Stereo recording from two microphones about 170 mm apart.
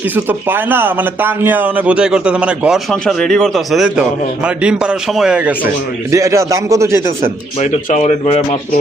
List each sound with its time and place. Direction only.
0.3 s speech: 10° right (ahead or behind)
7.6 s speech: 45° left (ahead or behind)